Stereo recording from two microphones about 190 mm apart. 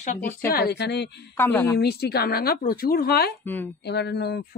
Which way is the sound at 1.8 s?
55° left (ahead or behind).